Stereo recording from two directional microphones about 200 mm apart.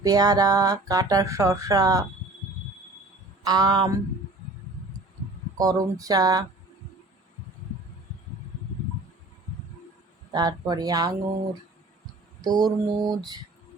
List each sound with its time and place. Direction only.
0.0 s speech: 20° right (ahead or behind)
3.4 s mantra: 20° right (ahead or behind)
5.5 s mantra: 20° right (ahead or behind)
10.3 s mantra: 20° right (ahead or behind)
12.4 s mantra: 20° right (ahead or behind)